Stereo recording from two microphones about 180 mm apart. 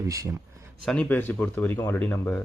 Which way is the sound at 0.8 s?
5° left (ahead or behind).